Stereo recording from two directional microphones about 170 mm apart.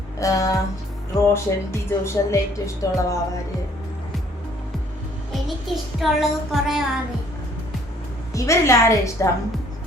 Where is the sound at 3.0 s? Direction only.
20° left (ahead or behind).